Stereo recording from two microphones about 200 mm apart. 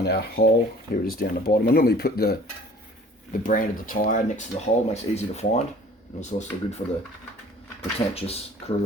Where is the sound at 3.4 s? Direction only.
45° left (ahead or behind).